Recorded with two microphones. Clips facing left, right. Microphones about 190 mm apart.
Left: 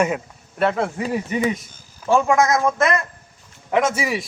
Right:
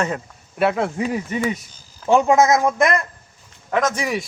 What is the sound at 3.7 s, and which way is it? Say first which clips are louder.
Speech: left 1 dB; 10° left (ahead or behind).